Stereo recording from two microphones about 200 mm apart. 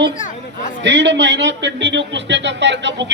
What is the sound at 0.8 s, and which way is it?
A man's voice, 60° right (ahead or behind).